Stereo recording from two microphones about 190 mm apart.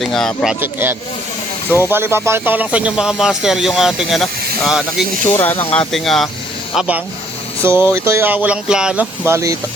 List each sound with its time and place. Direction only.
0.0 s speech: centre (ahead or behind)
0.6 s speech: 10° right (ahead or behind)
5.4 s speech: 10° left (ahead or behind); by 9.6 s 15° right (ahead or behind)